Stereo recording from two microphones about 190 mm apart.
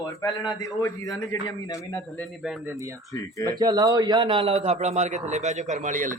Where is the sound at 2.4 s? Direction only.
5° right (ahead or behind).